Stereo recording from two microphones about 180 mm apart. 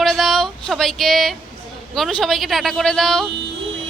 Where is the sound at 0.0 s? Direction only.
Centre (ahead or behind).